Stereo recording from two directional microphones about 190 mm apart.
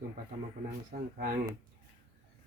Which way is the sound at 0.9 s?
45° right (ahead or behind).